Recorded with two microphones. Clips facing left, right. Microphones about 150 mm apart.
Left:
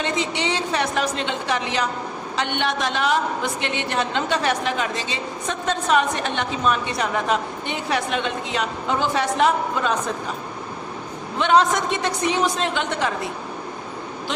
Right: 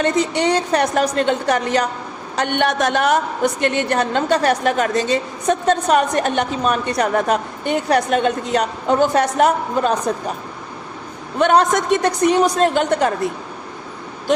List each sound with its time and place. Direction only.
0.0 s a woman's voice: 45° right (ahead or behind)
11.3 s a woman's voice: 50° right (ahead or behind)